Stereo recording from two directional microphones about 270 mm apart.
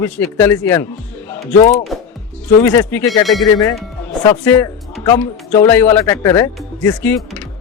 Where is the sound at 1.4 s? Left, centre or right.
Left.